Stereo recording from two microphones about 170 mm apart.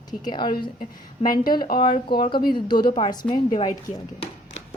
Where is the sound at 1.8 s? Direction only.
30° left (ahead or behind).